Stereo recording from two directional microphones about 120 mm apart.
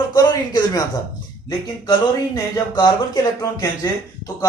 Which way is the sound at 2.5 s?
35° left (ahead or behind).